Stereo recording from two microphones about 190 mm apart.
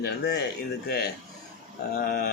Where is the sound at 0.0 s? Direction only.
60° left (ahead or behind).